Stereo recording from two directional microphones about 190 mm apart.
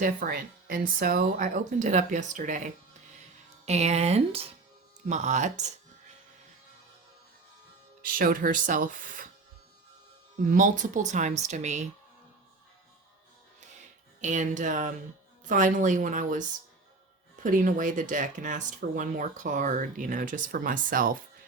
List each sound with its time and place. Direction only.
0.0 s speech: 50° right (ahead or behind)
3.7 s speech: 35° right (ahead or behind)
8.1 s speech: 50° right (ahead or behind)
10.4 s speech: 45° right (ahead or behind)
14.2 s speech: 40° right (ahead or behind)
17.4 s speech: 45° right (ahead or behind)